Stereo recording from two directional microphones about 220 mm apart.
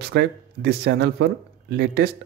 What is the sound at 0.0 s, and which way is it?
Speech, 45° right (ahead or behind).